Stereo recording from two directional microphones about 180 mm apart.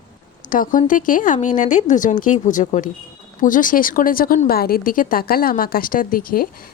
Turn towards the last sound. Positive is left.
turn(degrees=55)  # may be behind; listen again after turning